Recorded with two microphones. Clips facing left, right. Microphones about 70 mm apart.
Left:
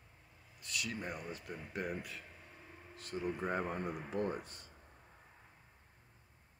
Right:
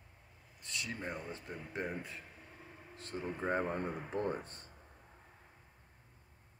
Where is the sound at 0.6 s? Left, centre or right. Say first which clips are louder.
Even; right.